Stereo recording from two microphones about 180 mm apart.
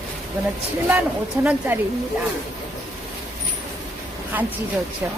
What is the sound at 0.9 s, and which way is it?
Speech, 10° right (ahead or behind).